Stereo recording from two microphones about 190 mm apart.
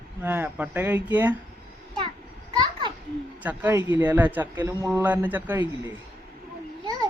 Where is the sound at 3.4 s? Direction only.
10° right (ahead or behind).